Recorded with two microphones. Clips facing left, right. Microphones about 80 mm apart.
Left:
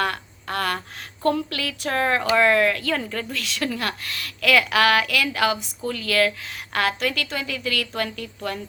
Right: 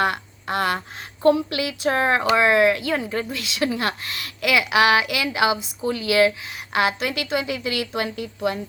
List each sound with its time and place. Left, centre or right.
0.0 s a woman's voice: centre